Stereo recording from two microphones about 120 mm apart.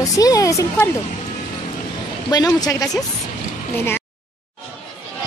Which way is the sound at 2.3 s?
30° left (ahead or behind).